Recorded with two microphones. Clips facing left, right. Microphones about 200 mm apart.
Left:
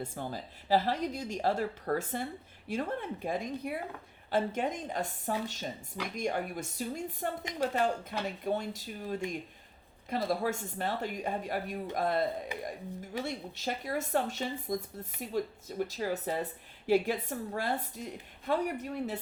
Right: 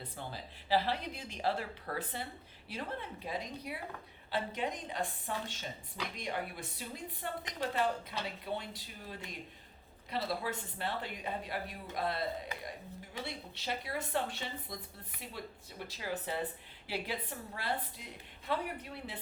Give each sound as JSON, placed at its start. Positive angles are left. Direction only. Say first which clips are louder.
{"t": 0.0, "sound": "a woman's voice", "louder": "left 7 dB", "side_deg": 45}